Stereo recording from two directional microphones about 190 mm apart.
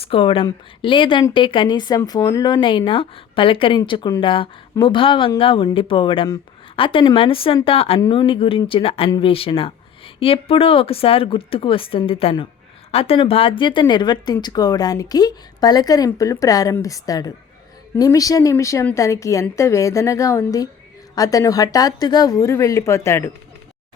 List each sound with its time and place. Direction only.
0.0 s a woman's voice: 30° left (ahead or behind); by 23.3 s 15° left (ahead or behind)